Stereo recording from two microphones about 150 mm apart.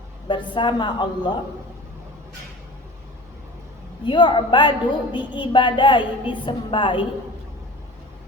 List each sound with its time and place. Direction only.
0.3 s a woman's voice: 30° left (ahead or behind)
4.0 s a woman's voice: 30° left (ahead or behind)